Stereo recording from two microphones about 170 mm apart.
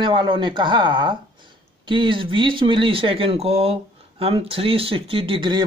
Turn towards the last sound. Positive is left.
turn(degrees=-30)  # may be behind; listen again after turning